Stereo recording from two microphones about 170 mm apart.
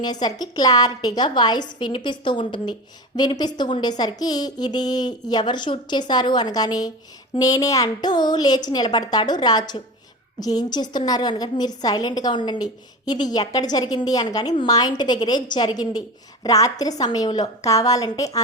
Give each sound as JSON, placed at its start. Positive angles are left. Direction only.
{"t": 0.0, "sound": "a woman's voice", "side_deg": 25}